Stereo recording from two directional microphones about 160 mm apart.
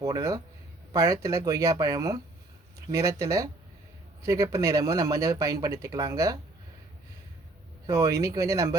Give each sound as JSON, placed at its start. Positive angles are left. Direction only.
{"t": 0.0, "sound": "speech", "side_deg": -20}
{"t": 7.9, "sound": "speech", "side_deg": -20}